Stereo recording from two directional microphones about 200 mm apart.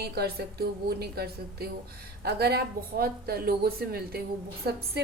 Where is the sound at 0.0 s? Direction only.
55° right (ahead or behind).